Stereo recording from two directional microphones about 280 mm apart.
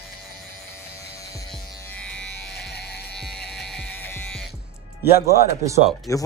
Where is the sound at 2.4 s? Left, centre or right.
Left.